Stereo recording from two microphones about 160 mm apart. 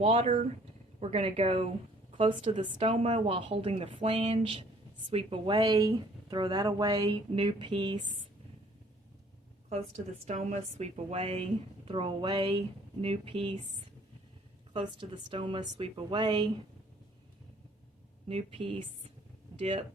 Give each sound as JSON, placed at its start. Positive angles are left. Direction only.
{"t": 0.0, "sound": "a woman's voice", "side_deg": -35}
{"t": 10.2, "sound": "a woman's voice", "side_deg": -45}
{"t": 14.7, "sound": "a woman's voice", "side_deg": -35}
{"t": 18.3, "sound": "a woman's voice", "side_deg": -35}
{"t": 19.5, "sound": "speech", "side_deg": -45}